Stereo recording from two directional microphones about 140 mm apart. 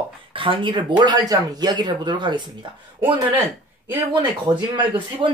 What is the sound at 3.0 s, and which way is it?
Speech, 20° right (ahead or behind).